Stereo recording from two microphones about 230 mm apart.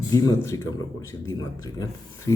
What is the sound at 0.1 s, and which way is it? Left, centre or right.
Speech, centre.